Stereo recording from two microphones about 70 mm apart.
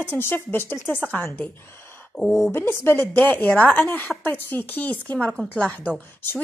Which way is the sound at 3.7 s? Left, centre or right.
Left.